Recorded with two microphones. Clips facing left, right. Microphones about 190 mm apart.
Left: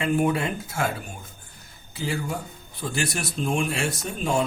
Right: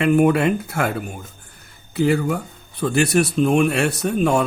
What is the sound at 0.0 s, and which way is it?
Speech, 65° right (ahead or behind).